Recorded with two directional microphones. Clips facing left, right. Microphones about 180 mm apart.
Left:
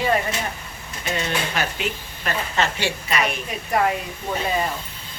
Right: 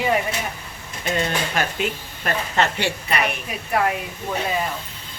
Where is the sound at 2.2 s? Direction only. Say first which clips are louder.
Right 2 dB; 55° right (ahead or behind).